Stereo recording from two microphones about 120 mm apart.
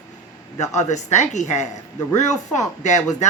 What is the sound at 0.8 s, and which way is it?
Speech, 75° left (ahead or behind).